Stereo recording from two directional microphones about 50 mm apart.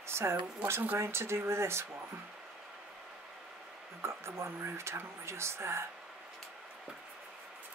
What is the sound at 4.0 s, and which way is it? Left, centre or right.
Speech, right.